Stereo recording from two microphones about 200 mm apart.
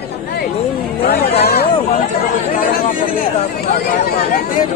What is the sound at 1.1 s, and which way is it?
Speech, 55° left (ahead or behind).